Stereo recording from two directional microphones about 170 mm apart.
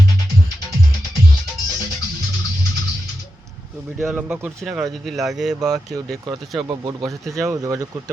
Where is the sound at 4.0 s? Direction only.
Centre (ahead or behind).